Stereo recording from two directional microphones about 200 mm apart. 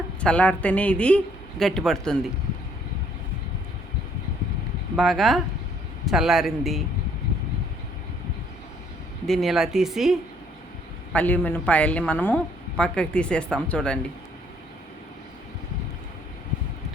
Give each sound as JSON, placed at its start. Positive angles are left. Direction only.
{"t": 0.2, "sound": "a man's voice", "side_deg": 5}
{"t": 4.9, "sound": "a man's voice", "side_deg": 0}
{"t": 9.2, "sound": "a man's voice", "side_deg": 0}